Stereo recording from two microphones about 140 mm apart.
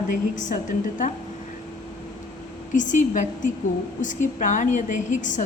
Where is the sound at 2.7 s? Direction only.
65° left (ahead or behind).